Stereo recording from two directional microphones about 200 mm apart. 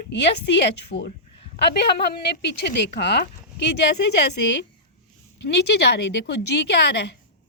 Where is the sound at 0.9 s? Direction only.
50° left (ahead or behind).